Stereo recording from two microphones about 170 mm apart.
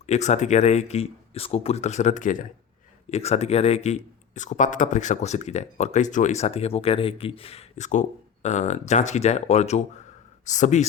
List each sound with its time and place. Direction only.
0.0 s speech: 45° left (ahead or behind)
3.1 s speech: 40° left (ahead or behind)